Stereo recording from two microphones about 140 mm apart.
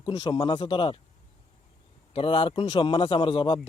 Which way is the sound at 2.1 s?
40° left (ahead or behind).